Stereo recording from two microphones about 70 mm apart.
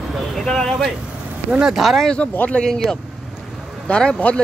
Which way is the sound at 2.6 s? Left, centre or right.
Centre.